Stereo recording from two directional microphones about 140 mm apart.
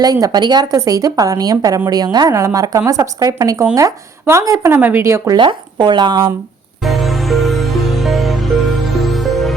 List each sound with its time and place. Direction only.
0.0 s a woman's voice: 25° right (ahead or behind)
5.4 s speech: 35° right (ahead or behind)
6.8 s music: centre (ahead or behind)